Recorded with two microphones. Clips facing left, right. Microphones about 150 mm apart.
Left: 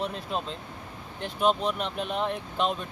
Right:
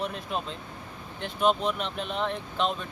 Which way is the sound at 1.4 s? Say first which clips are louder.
Even; centre (ahead or behind).